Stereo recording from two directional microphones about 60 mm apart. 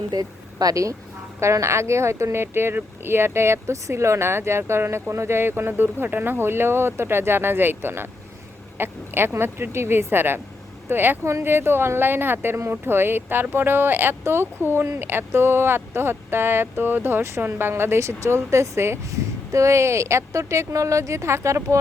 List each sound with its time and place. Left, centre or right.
0.2 s speech: right
1.4 s speech: right
18.0 s speech: right